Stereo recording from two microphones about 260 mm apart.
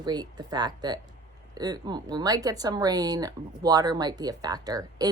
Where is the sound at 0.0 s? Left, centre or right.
Centre.